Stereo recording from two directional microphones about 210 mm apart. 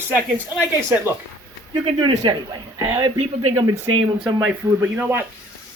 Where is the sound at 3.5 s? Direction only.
15° right (ahead or behind).